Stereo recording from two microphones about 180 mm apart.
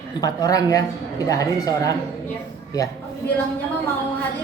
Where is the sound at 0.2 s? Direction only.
20° left (ahead or behind).